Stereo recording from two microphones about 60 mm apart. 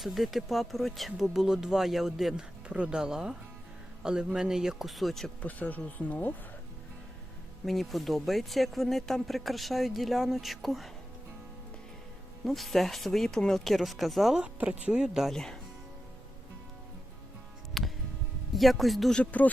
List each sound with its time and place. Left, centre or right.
0.0 s speech: centre
2.6 s speech: centre
5.4 s speech: left
7.6 s speech: centre
12.5 s speech: centre
14.3 s speech: centre
15.3 s speech: centre
17.8 s music: centre
18.5 s speech: centre
19.1 s speech: left